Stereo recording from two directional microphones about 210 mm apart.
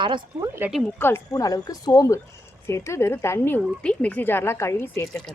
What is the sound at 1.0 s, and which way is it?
Speech, 10° left (ahead or behind).